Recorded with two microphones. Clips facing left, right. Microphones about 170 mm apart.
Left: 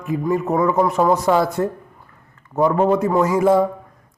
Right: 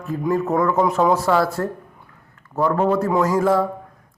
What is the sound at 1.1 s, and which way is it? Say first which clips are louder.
A man's voice: left 1 dB; 15° left (ahead or behind).